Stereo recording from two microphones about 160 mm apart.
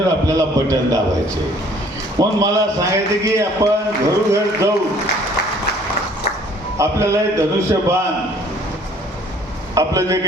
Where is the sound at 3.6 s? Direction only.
20° right (ahead or behind).